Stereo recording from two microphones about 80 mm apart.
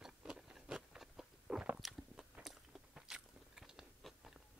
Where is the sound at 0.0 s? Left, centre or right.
Centre.